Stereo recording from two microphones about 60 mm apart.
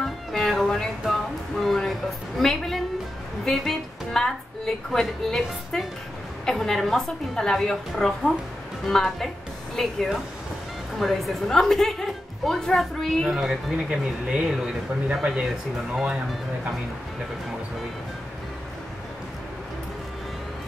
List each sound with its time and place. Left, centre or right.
0.4 s a sound: centre
3.4 s a woman's voice: centre
11.0 s a woman's voice: centre